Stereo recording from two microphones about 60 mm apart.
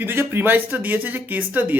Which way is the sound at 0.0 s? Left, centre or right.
Right.